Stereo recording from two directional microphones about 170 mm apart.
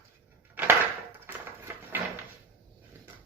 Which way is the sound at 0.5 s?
10° right (ahead or behind).